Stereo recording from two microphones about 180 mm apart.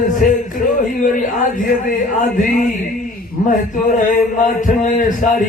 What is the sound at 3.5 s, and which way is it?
A man's voice, 45° left (ahead or behind).